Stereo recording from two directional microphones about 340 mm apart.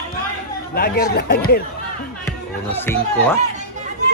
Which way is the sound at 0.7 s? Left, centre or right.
Left.